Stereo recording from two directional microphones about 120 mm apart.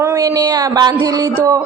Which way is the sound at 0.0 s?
30° right (ahead or behind).